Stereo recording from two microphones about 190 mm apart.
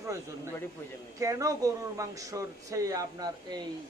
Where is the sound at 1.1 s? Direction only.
15° right (ahead or behind).